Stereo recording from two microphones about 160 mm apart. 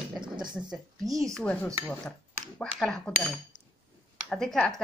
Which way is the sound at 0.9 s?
20° right (ahead or behind).